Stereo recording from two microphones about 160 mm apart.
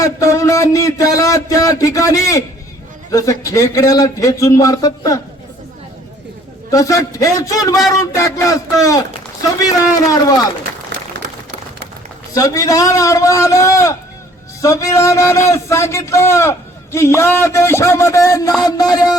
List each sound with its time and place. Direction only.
0.0 s a man's voice: 20° left (ahead or behind)
6.7 s a man's voice: 20° left (ahead or behind)
9.6 s a man's voice: 20° left (ahead or behind)
12.3 s a man's voice: 20° left (ahead or behind)